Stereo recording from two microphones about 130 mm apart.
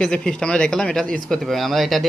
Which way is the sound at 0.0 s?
5° left (ahead or behind).